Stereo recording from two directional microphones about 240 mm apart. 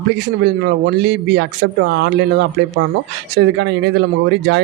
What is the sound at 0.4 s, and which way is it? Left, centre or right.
Speech, right.